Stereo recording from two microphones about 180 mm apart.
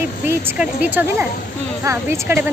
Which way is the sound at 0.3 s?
10° right (ahead or behind).